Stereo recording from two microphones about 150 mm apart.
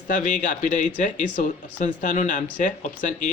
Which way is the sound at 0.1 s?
55° left (ahead or behind).